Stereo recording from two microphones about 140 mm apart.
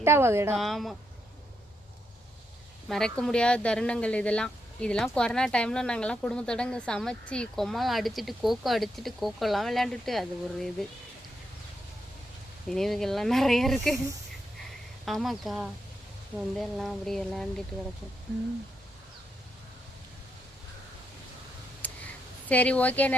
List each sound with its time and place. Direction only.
0.0 s a woman's voice: 15° right (ahead or behind)
0.5 s speech: centre (ahead or behind)
2.9 s speech: 5° left (ahead or behind)
12.6 s speech: centre (ahead or behind)
15.0 s speech: centre (ahead or behind)
21.8 s a sound: 10° left (ahead or behind)
22.4 s speech: 10° left (ahead or behind)